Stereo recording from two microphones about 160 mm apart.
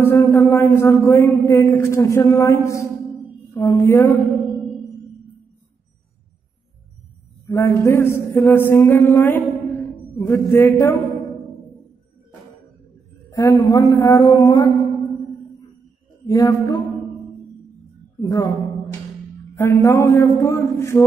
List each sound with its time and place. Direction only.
0.0 s a man's voice: 15° left (ahead or behind)
7.4 s a man's voice: 20° left (ahead or behind)
13.3 s speech: 20° left (ahead or behind)
16.3 s speech: 25° left (ahead or behind)
18.2 s speech: 25° left (ahead or behind)
19.5 s a man's voice: 15° left (ahead or behind)